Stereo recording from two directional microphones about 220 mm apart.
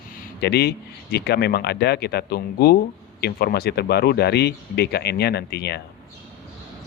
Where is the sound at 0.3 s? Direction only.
45° left (ahead or behind).